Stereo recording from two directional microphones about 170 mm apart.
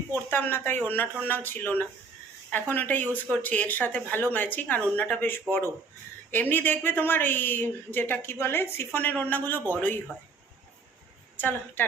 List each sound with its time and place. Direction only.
0.1 s speech: 10° left (ahead or behind)
11.3 s speech: 10° left (ahead or behind)